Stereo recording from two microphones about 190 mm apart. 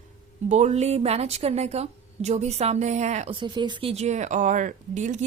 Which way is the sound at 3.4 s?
25° right (ahead or behind).